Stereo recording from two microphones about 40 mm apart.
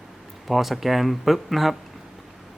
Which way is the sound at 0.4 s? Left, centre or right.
Centre.